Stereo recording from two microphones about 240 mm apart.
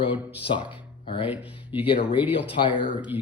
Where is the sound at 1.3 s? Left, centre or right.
Centre.